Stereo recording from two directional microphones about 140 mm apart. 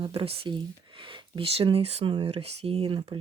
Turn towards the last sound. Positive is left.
turn(degrees=-40)  # may be behind; listen again after turning